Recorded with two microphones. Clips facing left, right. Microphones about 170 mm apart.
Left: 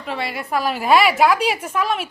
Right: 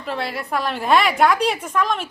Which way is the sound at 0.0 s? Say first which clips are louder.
Even; centre (ahead or behind).